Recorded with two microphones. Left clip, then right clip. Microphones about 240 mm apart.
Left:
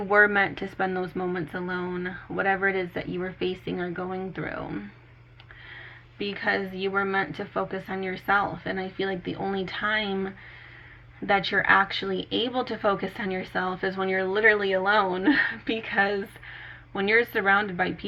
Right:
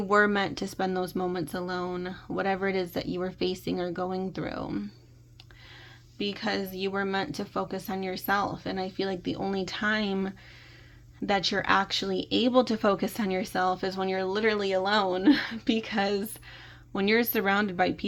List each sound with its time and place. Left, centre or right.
0.1 s speech: right
0.9 s speech: right
1.3 s speech: right
6.1 s a woman's voice: right